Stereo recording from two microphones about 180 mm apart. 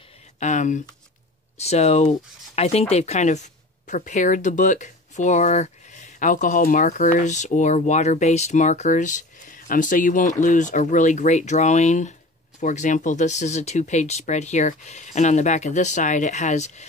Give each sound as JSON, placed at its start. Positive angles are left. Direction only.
{"t": 0.4, "sound": "speech", "side_deg": 45}